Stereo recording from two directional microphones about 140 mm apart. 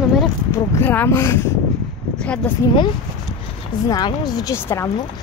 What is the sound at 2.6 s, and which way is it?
Speech, 20° left (ahead or behind).